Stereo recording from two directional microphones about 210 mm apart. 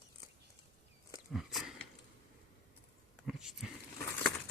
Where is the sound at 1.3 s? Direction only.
Centre (ahead or behind).